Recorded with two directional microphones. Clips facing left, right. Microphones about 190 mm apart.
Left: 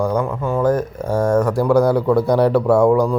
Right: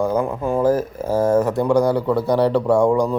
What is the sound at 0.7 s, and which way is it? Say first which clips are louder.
Speech: even; 5° right (ahead or behind).